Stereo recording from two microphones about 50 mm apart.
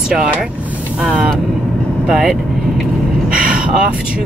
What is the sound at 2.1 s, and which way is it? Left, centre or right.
Speech, centre.